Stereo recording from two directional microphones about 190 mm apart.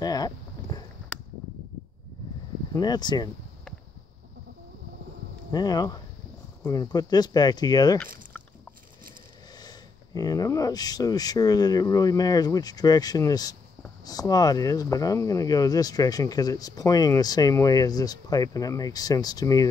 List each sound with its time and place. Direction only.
0.0 s a sound: 20° left (ahead or behind)
2.7 s speech: 20° left (ahead or behind)
5.5 s speech: 20° left (ahead or behind)
9.6 s speech: 20° left (ahead or behind)